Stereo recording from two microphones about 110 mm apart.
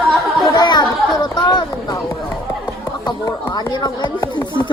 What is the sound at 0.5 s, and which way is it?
Speech, 35° left (ahead or behind).